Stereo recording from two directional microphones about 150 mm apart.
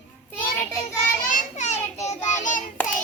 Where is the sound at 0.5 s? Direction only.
20° left (ahead or behind).